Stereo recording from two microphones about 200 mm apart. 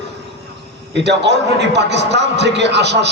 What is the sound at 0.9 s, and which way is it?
A man's voice, 60° right (ahead or behind).